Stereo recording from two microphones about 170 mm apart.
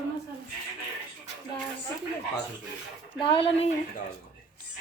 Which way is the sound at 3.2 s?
30° left (ahead or behind).